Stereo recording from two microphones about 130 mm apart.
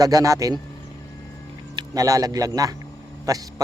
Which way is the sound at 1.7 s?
25° right (ahead or behind).